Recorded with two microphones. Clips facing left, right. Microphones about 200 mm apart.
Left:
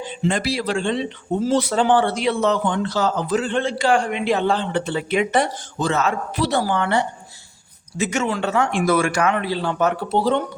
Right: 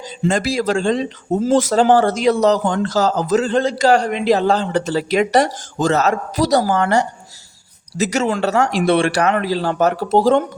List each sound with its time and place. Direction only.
0.0 s speech: 45° right (ahead or behind)